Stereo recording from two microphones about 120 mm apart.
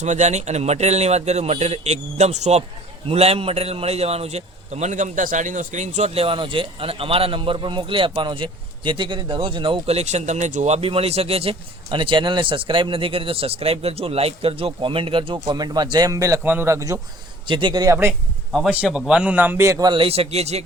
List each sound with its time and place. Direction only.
0.0 s a man's voice: 80° right; by 9.8 s 45° right (ahead or behind)
9.8 s speech: 65° right (ahead or behind); by 10.8 s 85° right
10.8 s a man's voice: 55° right (ahead or behind); by 17.0 s 25° right (ahead or behind)
17.4 s a man's voice: 40° right (ahead or behind)
17.8 s speech: 20° right (ahead or behind)
18.9 s a man's voice: 5° right (ahead or behind); by 19.8 s 20° right (ahead or behind)
19.8 s speech: 45° right (ahead or behind); by 20.6 s 65° right (ahead or behind)